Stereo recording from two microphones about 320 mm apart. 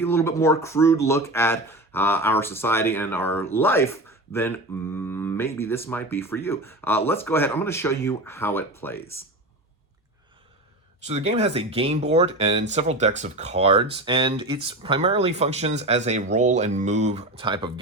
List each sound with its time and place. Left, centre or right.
0.0 s speech: centre
11.0 s speech: centre